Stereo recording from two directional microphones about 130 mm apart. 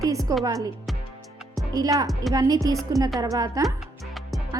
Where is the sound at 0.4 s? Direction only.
30° right (ahead or behind).